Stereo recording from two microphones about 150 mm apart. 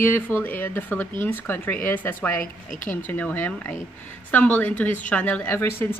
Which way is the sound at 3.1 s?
10° left (ahead or behind).